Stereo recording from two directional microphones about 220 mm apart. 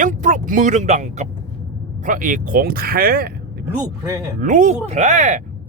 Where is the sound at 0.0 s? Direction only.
35° right (ahead or behind).